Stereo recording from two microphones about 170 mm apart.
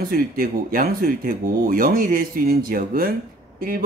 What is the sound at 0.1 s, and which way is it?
Speech, 55° right (ahead or behind).